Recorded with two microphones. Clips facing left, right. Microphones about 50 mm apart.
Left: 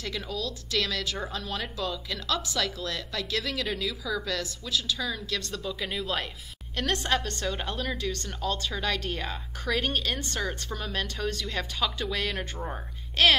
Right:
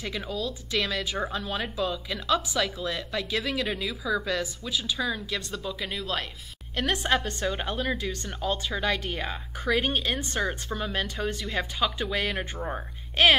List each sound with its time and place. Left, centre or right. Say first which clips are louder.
0.0 s a woman's voice: right 2 dB; centre
6.7 s a woman's voice: right 2 dB; centre